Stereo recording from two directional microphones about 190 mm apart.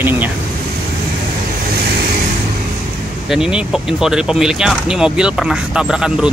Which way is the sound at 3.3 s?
5° right (ahead or behind).